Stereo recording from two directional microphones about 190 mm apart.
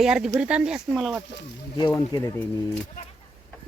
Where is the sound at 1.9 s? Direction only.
15° left (ahead or behind).